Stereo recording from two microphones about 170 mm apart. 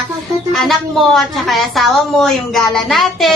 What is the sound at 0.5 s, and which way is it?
A woman's voice, centre (ahead or behind).